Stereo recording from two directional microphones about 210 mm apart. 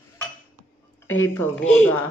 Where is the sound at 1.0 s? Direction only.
75° left (ahead or behind).